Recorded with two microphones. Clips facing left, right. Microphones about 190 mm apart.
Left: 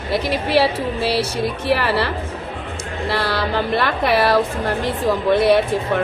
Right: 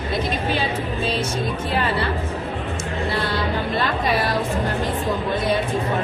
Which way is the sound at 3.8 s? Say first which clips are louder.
Left 4 dB; 70° left (ahead or behind).